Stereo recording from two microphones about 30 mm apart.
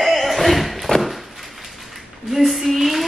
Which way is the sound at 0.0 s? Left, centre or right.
Centre.